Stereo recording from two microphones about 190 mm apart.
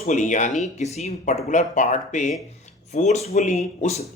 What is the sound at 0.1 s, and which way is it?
Speech, 40° left (ahead or behind).